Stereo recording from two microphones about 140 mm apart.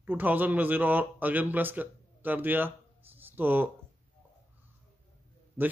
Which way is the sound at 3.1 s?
15° right (ahead or behind).